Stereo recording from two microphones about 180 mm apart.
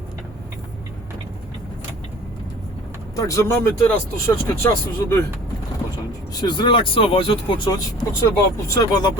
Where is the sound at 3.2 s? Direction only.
20° left (ahead or behind).